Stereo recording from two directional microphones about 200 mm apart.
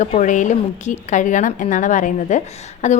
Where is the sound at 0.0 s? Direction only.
40° left (ahead or behind).